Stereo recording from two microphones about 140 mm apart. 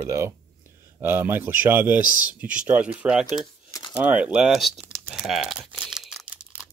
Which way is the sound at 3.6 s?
25° left (ahead or behind).